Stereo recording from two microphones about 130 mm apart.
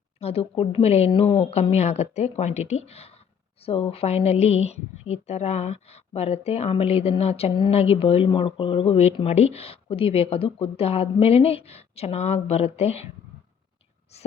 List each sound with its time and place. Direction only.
0.2 s speech: 50° left (ahead or behind)